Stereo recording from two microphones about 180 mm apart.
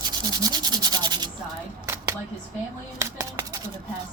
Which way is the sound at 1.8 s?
15° right (ahead or behind).